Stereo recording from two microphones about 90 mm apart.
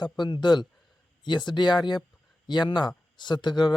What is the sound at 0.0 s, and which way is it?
Speech, 55° left (ahead or behind).